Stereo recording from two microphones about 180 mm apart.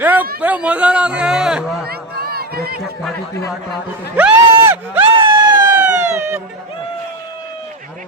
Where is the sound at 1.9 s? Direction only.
60° right (ahead or behind).